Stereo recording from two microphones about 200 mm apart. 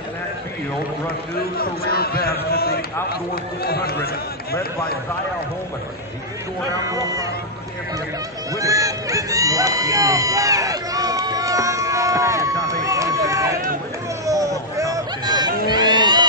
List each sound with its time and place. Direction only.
1.6 s a man's voice: 50° left (ahead or behind)
6.9 s speech: 20° right (ahead or behind)
8.5 s run: 15° right (ahead or behind)
14.2 s a sound: 15° right (ahead or behind)
15.7 s music: 20° right (ahead or behind)